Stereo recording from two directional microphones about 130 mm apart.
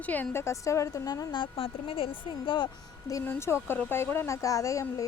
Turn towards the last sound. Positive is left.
turn(degrees=25)  # may be behind; listen again after turning